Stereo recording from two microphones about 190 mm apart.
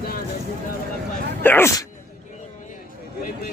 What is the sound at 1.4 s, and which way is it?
Speech, 10° left (ahead or behind).